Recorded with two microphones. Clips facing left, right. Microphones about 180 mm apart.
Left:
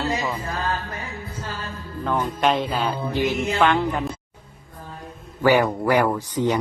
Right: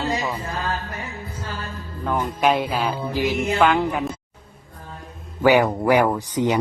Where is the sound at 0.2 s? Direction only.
10° right (ahead or behind).